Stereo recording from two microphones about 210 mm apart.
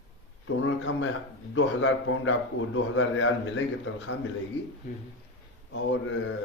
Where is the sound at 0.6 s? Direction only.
65° left (ahead or behind).